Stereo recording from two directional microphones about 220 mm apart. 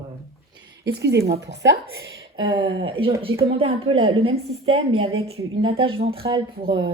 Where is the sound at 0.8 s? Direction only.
50° right (ahead or behind).